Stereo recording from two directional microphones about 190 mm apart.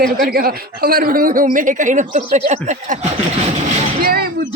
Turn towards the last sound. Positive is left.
turn(degrees=-55)  # may be behind; listen again after turning